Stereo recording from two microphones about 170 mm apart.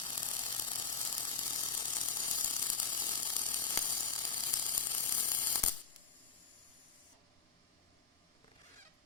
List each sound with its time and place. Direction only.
0.0 s ratchet: 30° left (ahead or behind)